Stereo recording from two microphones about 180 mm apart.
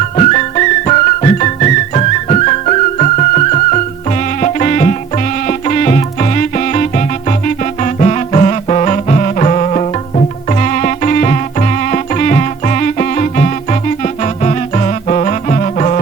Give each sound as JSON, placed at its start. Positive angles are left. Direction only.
{"t": 0.2, "sound": "music", "side_deg": 40}